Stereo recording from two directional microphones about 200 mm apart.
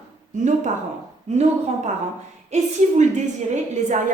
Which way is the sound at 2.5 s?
35° right (ahead or behind).